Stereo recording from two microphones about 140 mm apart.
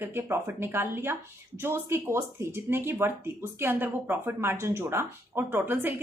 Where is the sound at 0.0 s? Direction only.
15° right (ahead or behind).